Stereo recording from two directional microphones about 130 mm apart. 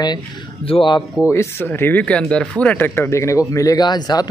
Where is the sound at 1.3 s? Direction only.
20° left (ahead or behind).